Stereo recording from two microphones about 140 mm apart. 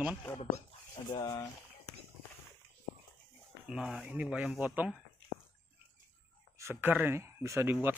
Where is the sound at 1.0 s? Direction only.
30° left (ahead or behind).